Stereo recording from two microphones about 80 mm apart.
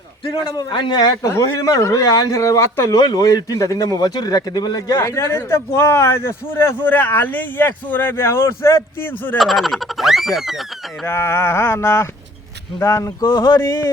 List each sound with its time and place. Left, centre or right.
0.4 s a man's voice: left
2.9 s a man's voice: left
4.9 s a man's voice: left
9.4 s speech: centre
11.0 s a man's voice: left
13.2 s speech: left